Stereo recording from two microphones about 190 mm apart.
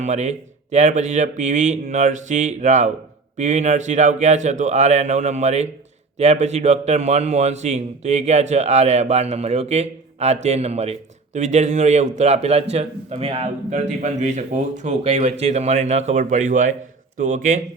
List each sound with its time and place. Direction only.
0.0 s a man's voice: 35° right (ahead or behind)